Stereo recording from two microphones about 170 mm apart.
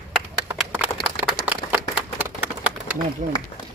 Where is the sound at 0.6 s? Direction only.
5° right (ahead or behind).